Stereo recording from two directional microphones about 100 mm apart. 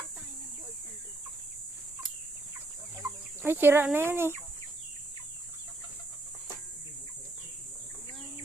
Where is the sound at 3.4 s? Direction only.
20° right (ahead or behind).